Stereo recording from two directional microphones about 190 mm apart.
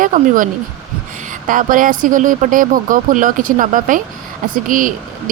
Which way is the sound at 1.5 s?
45° right (ahead or behind).